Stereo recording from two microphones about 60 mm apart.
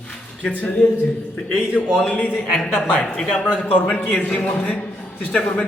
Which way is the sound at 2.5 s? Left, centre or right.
Centre.